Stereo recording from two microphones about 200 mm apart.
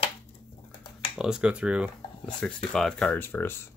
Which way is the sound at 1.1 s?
5° right (ahead or behind).